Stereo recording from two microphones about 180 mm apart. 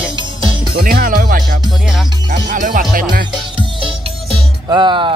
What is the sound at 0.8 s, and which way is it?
Speech, 50° right (ahead or behind).